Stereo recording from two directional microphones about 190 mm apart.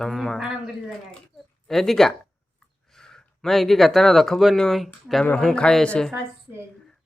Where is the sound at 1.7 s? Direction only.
Centre (ahead or behind).